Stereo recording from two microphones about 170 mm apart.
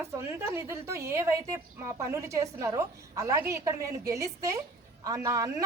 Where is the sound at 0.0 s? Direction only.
15° right (ahead or behind).